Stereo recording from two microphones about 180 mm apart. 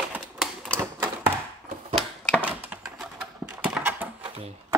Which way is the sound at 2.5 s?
10° right (ahead or behind).